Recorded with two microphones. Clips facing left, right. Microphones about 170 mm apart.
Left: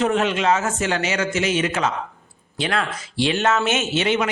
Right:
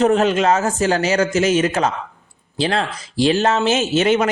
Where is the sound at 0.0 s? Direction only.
40° right (ahead or behind).